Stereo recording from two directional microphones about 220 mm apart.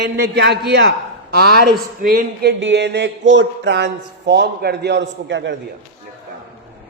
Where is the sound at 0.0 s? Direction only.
50° right (ahead or behind).